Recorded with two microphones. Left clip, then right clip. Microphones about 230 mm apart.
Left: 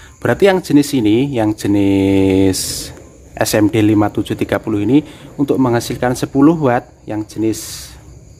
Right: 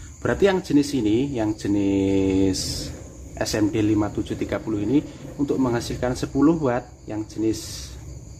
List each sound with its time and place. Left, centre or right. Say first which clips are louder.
0.2 s speech: left 8 dB; left